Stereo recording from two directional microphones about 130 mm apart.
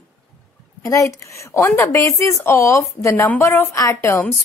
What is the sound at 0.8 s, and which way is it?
A woman's voice, 25° left (ahead or behind).